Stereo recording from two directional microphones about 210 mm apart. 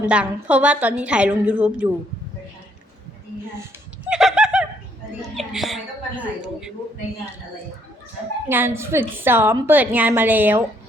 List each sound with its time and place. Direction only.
0.1 s a woman's voice: 5° right (ahead or behind)
4.1 s a sound: 5° right (ahead or behind)
5.4 s a woman's voice: centre (ahead or behind)
8.4 s a woman's voice: 10° right (ahead or behind)